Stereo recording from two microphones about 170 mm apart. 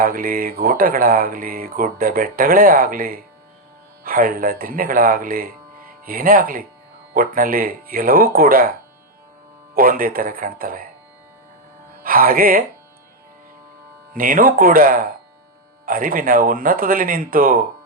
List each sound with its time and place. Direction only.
0.0 s mantra: 55° right (ahead or behind)
4.0 s speech: 55° right (ahead or behind)
7.1 s mantra: 55° right (ahead or behind)
9.7 s mantra: 55° right (ahead or behind)
12.0 s mantra: 55° right (ahead or behind)
14.1 s mantra: 55° right (ahead or behind)